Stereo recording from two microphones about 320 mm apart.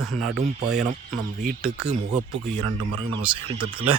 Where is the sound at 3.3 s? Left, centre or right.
Centre.